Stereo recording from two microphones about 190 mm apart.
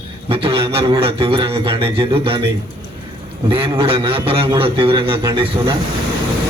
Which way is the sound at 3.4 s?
25° right (ahead or behind).